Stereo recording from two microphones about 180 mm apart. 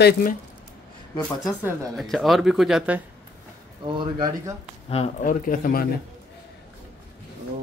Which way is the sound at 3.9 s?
25° right (ahead or behind).